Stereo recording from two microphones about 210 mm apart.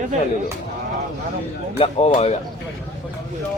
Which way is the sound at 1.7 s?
30° left (ahead or behind).